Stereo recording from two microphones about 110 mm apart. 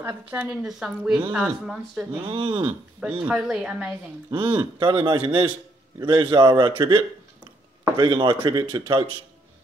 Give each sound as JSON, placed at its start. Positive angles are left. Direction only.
{"t": 0.0, "sound": "speech", "side_deg": -15}
{"t": 0.7, "sound": "speech", "side_deg": -5}
{"t": 2.2, "sound": "a man's voice", "side_deg": -50}
{"t": 3.3, "sound": "speech", "side_deg": -5}
{"t": 4.3, "sound": "a man's voice", "side_deg": -45}